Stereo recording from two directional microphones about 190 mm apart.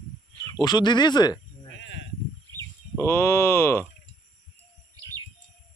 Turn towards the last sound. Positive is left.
turn(degrees=15)  # may be behind; listen again after turning